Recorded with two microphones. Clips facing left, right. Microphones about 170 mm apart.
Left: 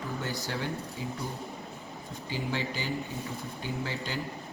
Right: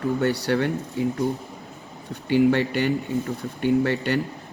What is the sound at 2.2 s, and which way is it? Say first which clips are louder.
A man's voice: right 15 dB; 65° right (ahead or behind).